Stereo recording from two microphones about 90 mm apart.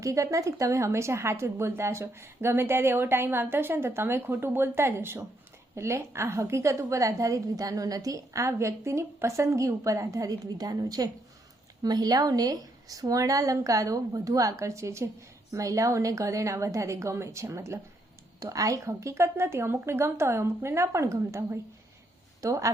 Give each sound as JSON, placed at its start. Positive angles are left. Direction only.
{"t": 0.0, "sound": "a woman's voice", "side_deg": -35}